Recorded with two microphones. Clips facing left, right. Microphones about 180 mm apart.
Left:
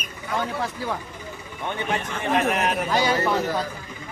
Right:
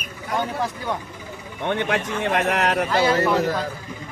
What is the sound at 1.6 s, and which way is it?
A man's voice, 75° right (ahead or behind).